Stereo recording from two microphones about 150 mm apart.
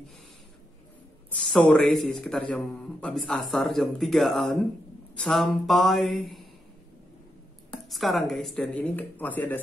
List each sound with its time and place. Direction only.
1.7 s a man's voice: centre (ahead or behind)
7.9 s speech: centre (ahead or behind)